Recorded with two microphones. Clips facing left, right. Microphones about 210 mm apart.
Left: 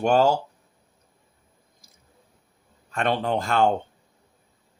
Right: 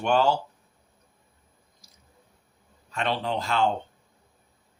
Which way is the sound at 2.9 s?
50° left (ahead or behind).